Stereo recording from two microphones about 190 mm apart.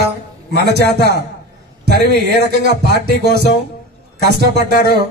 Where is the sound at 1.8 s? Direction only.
60° right (ahead or behind).